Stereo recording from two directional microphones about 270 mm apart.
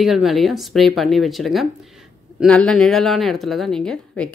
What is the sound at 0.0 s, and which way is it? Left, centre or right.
A woman's voice, centre.